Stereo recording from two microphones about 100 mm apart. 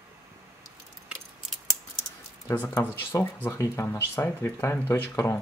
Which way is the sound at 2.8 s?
20° left (ahead or behind).